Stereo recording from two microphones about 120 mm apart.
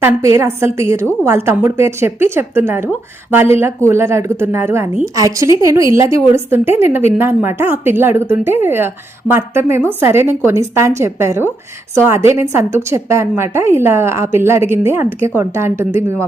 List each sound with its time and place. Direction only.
0.0 s a woman's voice: 25° right (ahead or behind)